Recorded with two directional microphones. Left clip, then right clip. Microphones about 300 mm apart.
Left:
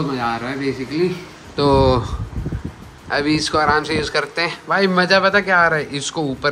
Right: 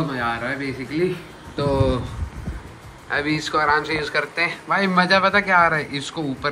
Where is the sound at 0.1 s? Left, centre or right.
Centre.